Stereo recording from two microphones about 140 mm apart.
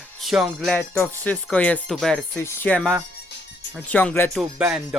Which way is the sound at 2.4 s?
15° left (ahead or behind).